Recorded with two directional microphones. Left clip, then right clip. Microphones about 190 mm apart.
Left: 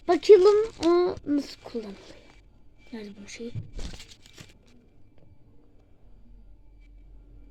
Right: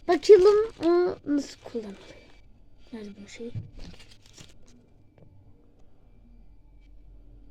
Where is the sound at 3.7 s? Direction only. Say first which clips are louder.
Left 6 dB; 50° left (ahead or behind).